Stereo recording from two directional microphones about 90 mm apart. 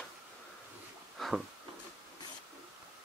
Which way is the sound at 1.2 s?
5° left (ahead or behind).